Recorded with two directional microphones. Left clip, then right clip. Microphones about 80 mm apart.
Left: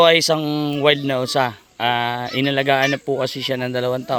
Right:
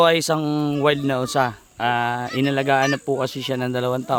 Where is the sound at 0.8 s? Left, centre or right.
Right.